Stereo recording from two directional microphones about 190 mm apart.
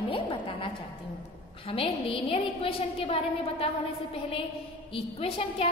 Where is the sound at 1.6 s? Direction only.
30° left (ahead or behind).